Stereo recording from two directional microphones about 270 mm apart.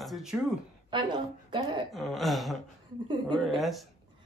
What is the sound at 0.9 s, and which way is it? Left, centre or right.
Speech, centre.